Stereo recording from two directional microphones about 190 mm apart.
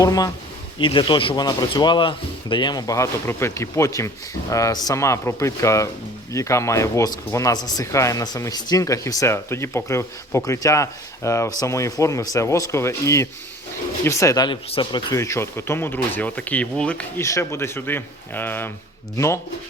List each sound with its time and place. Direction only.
0.0 s a man's voice: 20° left (ahead or behind)